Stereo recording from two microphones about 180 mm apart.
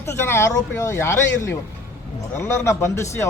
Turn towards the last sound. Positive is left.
turn(degrees=15)  # may be behind; listen again after turning